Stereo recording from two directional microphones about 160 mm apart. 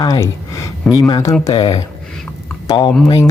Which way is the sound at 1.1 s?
20° left (ahead or behind).